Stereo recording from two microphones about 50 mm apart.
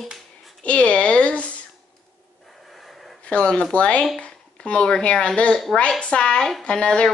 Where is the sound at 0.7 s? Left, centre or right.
Left.